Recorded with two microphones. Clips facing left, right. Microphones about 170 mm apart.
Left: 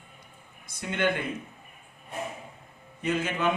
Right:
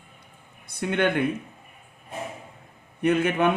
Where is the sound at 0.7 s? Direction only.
60° right (ahead or behind).